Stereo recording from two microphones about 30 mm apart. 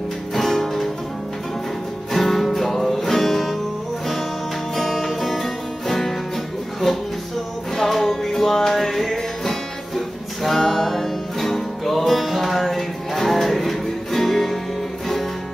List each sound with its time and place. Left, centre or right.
0.3 s music: centre
2.1 s music: centre
4.7 s music: centre
7.7 s music: centre